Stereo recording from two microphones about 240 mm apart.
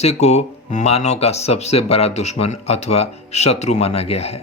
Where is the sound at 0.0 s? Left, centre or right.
Left.